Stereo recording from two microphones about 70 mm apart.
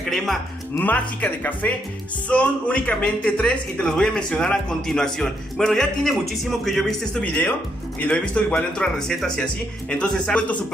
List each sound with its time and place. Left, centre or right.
0.0 s speech: centre
0.7 s a man's voice: left; by 7.0 s centre
7.2 s a man's voice: centre